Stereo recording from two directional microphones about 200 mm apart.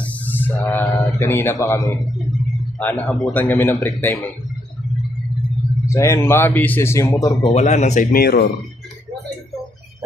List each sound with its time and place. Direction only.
0.0 s speech: 10° left (ahead or behind)
5.9 s speech: 15° left (ahead or behind)
7.5 s speech: 35° left (ahead or behind); by 8.5 s 50° left (ahead or behind)